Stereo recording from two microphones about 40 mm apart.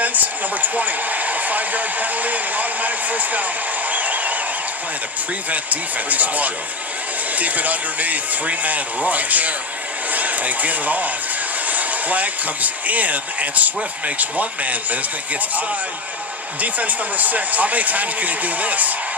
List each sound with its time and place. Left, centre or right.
0.0 s speech: right
3.8 s a sound: right
5.5 s speech: right